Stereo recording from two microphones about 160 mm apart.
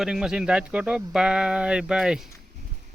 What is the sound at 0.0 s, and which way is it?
Speech, 5° right (ahead or behind).